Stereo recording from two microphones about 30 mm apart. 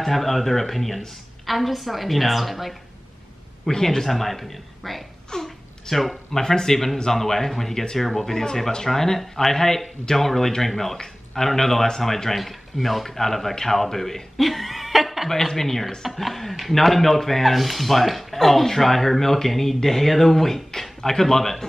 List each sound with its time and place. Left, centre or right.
0.0 s a woman's voice: centre
3.7 s a woman's voice: centre
5.3 s a sound: centre
6.4 s speech: centre
15.2 s a woman's voice: centre